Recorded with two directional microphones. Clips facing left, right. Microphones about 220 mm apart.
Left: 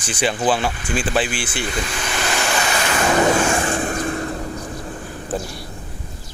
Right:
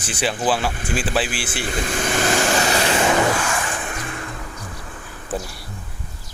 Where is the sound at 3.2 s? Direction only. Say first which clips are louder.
Left 5 dB; 30° left (ahead or behind).